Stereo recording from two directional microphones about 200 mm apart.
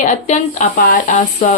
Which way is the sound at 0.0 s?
40° left (ahead or behind).